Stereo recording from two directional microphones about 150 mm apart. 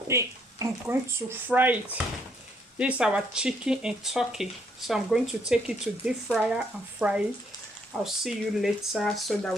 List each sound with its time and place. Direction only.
0.1 s speech: 20° right (ahead or behind); by 9.5 s centre (ahead or behind)